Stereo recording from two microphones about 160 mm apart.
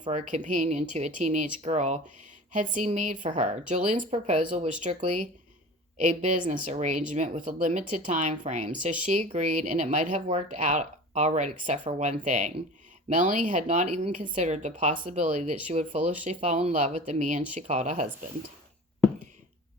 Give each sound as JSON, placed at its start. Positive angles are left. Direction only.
{"t": 0.1, "sound": "speech", "side_deg": -50}
{"t": 6.1, "sound": "speech", "side_deg": -55}